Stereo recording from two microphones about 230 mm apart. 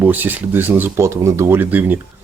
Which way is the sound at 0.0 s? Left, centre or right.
Centre.